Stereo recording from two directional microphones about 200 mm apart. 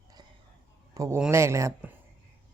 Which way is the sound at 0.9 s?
15° right (ahead or behind).